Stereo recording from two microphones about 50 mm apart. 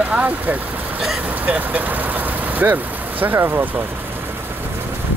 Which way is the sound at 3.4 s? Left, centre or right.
Right.